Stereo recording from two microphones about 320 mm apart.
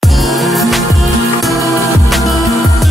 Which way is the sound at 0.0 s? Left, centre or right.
Centre.